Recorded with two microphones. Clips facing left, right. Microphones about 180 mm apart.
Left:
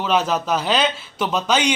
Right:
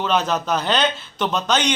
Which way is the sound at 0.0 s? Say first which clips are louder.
Left 1 dB; 5° left (ahead or behind).